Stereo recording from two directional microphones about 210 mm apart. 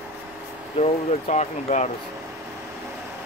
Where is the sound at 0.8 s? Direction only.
35° left (ahead or behind).